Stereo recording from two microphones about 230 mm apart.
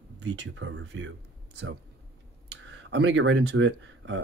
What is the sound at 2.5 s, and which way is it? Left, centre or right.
Speech, right.